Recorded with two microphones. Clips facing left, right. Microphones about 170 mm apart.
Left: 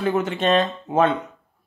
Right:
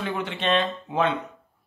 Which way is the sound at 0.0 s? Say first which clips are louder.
Left 7 dB; 40° left (ahead or behind).